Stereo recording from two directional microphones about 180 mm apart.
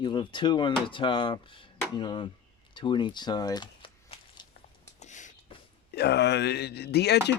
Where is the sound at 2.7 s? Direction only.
25° left (ahead or behind).